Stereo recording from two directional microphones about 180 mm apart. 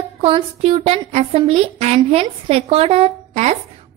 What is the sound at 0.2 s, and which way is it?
A child's voice, 30° right (ahead or behind).